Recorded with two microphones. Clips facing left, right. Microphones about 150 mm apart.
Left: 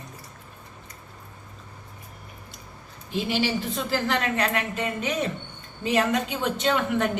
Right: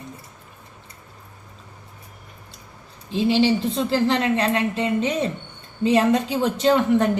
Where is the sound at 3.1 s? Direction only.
30° right (ahead or behind).